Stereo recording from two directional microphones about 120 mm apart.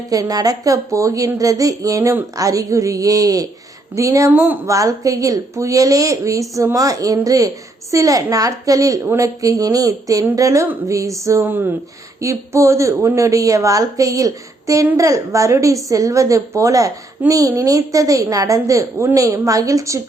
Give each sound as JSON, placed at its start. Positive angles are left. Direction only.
{"t": 0.1, "sound": "a woman's voice", "side_deg": -30}
{"t": 11.4, "sound": "a woman's voice", "side_deg": -15}